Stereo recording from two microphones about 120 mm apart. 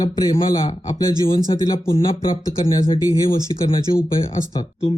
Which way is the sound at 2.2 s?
30° left (ahead or behind).